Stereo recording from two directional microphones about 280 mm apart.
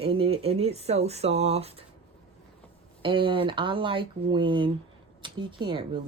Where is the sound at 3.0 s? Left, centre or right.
Centre.